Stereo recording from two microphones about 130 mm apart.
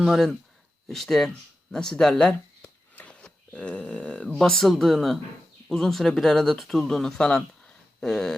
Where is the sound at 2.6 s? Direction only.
10° left (ahead or behind).